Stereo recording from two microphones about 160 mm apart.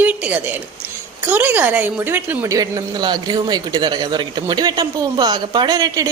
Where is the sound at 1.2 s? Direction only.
15° right (ahead or behind).